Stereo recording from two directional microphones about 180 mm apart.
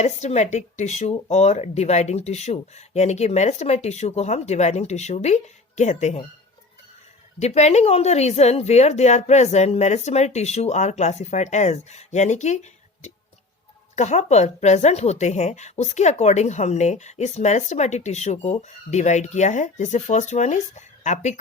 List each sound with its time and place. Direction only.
0.0 s speech: 40° left (ahead or behind)
7.3 s speech: 35° left (ahead or behind)
13.9 s speech: 40° left (ahead or behind)